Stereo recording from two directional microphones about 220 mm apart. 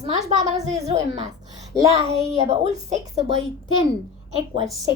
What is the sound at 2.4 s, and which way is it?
Speech, 30° right (ahead or behind).